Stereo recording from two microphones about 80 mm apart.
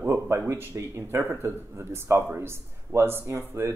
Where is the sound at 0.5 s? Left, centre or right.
Right.